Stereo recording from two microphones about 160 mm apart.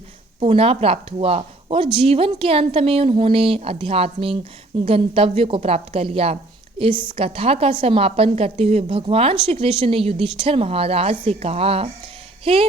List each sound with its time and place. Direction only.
0.3 s a woman's voice: 35° right (ahead or behind)